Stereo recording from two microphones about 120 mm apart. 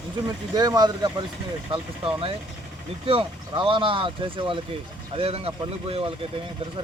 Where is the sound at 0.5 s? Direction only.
35° right (ahead or behind).